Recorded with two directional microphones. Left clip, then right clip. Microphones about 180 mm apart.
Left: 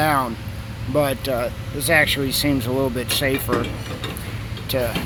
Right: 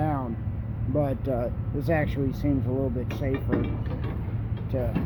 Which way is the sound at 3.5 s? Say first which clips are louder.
Left 4 dB; 45° left (ahead or behind).